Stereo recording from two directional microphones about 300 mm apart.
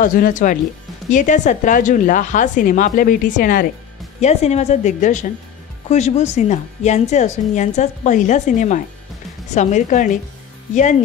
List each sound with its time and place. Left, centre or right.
0.0 s a woman's voice: left